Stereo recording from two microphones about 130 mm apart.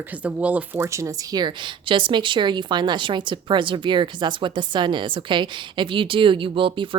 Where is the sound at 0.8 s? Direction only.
25° right (ahead or behind).